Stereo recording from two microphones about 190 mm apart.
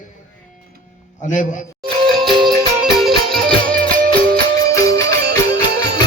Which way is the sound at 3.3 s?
5° left (ahead or behind).